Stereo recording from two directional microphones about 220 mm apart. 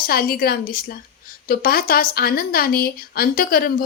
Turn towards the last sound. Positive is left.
turn(degrees=40)  # may be behind; listen again after turning